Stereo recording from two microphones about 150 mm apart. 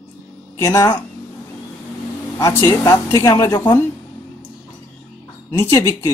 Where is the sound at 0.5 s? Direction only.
20° left (ahead or behind).